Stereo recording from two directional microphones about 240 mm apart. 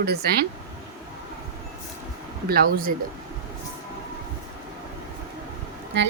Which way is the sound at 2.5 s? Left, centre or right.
Right.